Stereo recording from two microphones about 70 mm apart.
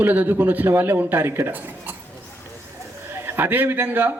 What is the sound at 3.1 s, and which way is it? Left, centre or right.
A man's voice, right.